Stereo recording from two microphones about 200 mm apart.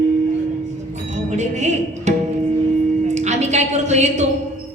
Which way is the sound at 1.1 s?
35° right (ahead or behind).